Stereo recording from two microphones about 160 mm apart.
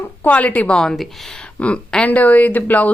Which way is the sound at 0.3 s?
10° left (ahead or behind).